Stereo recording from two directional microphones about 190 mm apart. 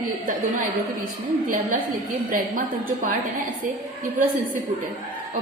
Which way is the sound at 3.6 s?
45° right (ahead or behind).